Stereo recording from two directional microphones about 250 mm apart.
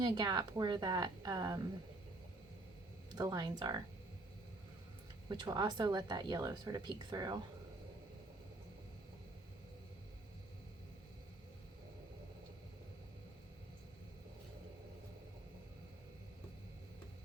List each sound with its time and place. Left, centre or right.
0.0 s speech: centre
3.2 s speech: centre
5.3 s speech: centre